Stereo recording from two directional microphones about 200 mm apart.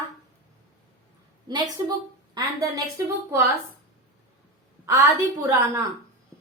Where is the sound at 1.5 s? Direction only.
20° right (ahead or behind).